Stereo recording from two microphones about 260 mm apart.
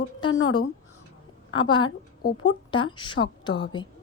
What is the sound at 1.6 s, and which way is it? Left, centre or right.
A woman's voice, centre.